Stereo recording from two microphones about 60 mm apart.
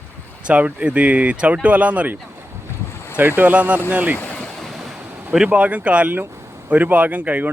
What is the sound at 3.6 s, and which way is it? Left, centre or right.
Speech, right.